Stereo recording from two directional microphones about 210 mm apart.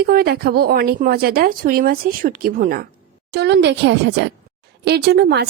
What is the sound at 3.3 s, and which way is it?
A woman's voice, 50° right (ahead or behind).